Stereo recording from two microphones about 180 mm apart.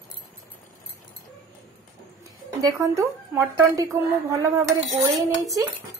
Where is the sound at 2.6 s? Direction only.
15° right (ahead or behind).